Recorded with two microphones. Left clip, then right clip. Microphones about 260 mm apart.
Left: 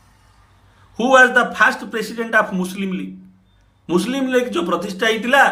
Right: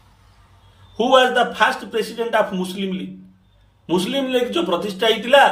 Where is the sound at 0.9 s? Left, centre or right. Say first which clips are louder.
Left 3 dB; centre.